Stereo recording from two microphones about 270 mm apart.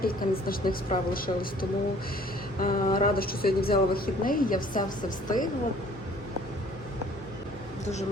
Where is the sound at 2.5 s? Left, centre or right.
Left.